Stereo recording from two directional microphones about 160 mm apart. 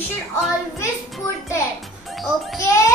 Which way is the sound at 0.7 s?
15° left (ahead or behind).